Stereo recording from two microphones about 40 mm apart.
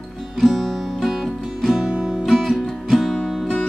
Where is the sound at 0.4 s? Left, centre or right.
Centre.